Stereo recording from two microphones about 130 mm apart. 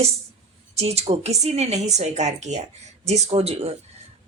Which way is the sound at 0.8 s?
55° right (ahead or behind).